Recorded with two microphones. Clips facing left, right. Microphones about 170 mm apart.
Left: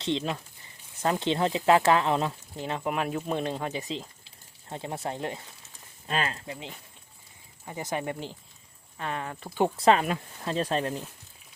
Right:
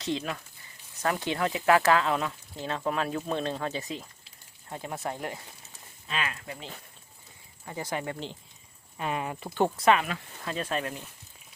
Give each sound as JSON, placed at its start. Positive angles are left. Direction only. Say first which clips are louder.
{"t": 0.0, "sound": "speech", "louder": "left 2 dB", "side_deg": 25}
{"t": 6.1, "sound": "speech", "louder": "left 4 dB", "side_deg": 35}
{"t": 6.5, "sound": "speech", "louder": "left 1 dB", "side_deg": 20}
{"t": 9.0, "sound": "speech", "louder": "right 2 dB", "side_deg": -10}
{"t": 9.6, "sound": "speech", "louder": "left 1 dB", "side_deg": 0}
{"t": 9.8, "sound": "speech", "louder": "left 4 dB", "side_deg": 35}